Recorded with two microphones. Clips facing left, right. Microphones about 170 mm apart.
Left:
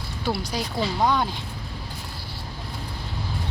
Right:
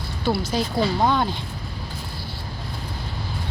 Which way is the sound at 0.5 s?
5° left (ahead or behind).